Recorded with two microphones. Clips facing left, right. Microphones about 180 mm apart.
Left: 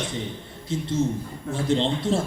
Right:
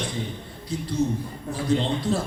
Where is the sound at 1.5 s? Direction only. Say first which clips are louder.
Left 1 dB; 25° left (ahead or behind).